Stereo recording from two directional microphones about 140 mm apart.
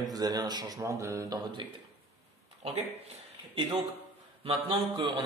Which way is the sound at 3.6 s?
40° right (ahead or behind).